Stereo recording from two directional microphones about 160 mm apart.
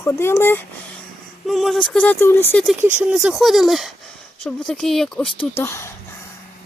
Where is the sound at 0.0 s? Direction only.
15° left (ahead or behind).